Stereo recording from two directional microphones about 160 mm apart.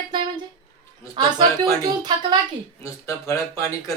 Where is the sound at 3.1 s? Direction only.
20° left (ahead or behind).